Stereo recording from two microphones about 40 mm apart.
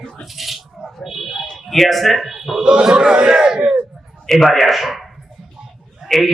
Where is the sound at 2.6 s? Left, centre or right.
Right.